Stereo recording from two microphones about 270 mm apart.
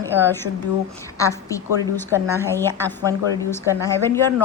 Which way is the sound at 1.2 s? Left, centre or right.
Centre.